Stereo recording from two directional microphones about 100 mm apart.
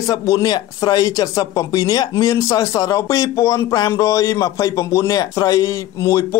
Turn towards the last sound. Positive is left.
turn(degrees=30)  # may be behind; listen again after turning